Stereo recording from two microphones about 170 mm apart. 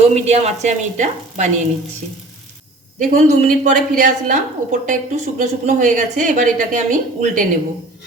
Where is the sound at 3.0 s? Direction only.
45° right (ahead or behind).